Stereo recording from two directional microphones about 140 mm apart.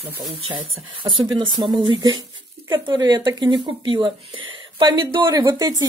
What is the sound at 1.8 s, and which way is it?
Speech, 30° right (ahead or behind).